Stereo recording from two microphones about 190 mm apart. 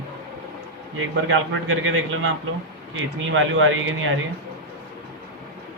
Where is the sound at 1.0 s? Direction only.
90° right.